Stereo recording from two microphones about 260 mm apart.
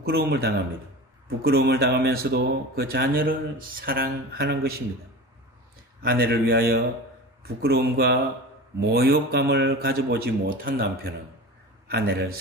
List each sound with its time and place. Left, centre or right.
0.0 s speech: right
6.0 s speech: right